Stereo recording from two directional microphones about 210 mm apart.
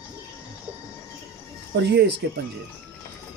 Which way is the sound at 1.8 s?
50° right (ahead or behind).